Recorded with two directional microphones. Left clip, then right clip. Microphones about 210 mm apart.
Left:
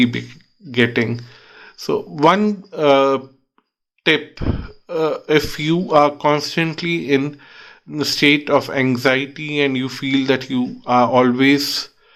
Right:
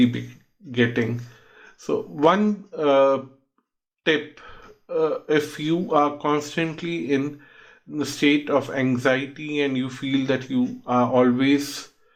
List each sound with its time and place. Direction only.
0.0 s speech: 30° left (ahead or behind)